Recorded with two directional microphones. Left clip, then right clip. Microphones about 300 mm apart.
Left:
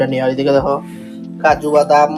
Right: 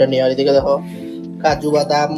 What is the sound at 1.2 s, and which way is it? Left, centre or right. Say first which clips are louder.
Music: left 3 dB; centre.